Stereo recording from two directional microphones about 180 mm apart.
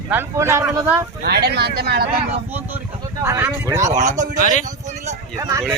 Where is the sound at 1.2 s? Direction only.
60° right (ahead or behind).